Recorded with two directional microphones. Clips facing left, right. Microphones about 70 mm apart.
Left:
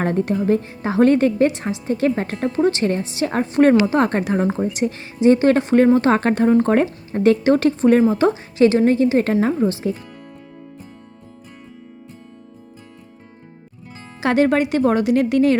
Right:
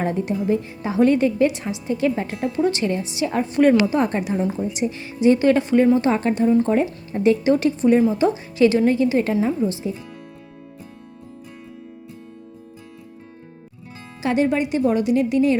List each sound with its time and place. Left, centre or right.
0.0 s a woman's voice: left
0.9 s a woman's voice: left
3.8 s a woman's voice: left
4.9 s a woman's voice: left
5.7 s speech: left
6.8 s speech: left
7.3 s a woman's voice: left
8.4 s a woman's voice: left
9.6 s speech: left
14.2 s a woman's voice: left